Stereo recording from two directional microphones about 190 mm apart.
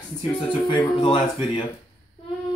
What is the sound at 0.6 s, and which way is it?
Speech, 25° left (ahead or behind).